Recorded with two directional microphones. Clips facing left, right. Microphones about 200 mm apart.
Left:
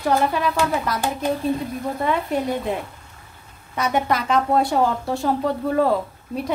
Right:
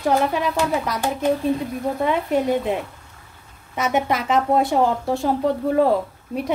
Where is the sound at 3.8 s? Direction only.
20° right (ahead or behind).